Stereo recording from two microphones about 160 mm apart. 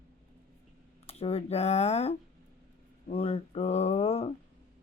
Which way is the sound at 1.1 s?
40° left (ahead or behind).